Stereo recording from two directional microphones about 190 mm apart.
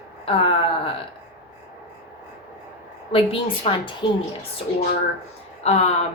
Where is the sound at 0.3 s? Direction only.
30° left (ahead or behind).